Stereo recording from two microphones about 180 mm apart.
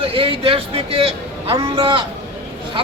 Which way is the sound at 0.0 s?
30° right (ahead or behind).